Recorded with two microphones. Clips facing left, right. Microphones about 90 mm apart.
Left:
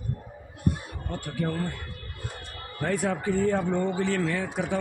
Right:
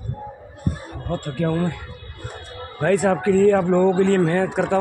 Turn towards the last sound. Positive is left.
turn(degrees=-65)  # may be behind; listen again after turning